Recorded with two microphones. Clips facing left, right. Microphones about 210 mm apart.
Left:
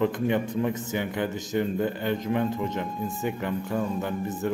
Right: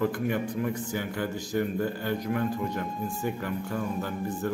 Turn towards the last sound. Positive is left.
turn(degrees=20)  # may be behind; listen again after turning